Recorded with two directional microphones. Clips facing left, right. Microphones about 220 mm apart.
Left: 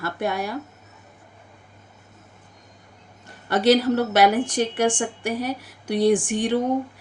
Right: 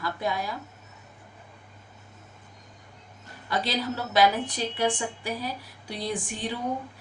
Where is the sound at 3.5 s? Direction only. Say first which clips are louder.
Left 11 dB; 80° left.